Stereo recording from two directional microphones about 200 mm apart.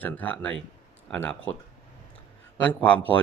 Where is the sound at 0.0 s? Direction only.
10° left (ahead or behind).